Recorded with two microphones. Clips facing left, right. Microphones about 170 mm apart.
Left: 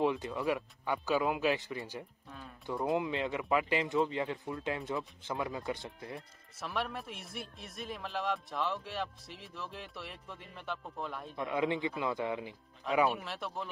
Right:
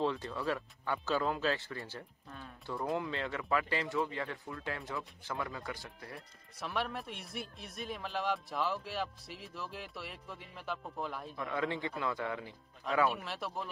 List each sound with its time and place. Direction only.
0.0 s speech: 15° left (ahead or behind)
2.2 s music: centre (ahead or behind)
2.6 s speech: 20° left (ahead or behind)
6.6 s a man's voice: centre (ahead or behind)
11.3 s speech: 20° left (ahead or behind)
13.1 s a man's voice: centre (ahead or behind)